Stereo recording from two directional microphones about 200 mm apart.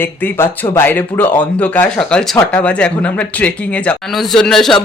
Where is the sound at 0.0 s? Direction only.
10° left (ahead or behind).